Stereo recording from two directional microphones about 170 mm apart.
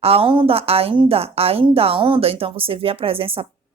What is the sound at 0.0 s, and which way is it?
A woman's voice, 35° right (ahead or behind).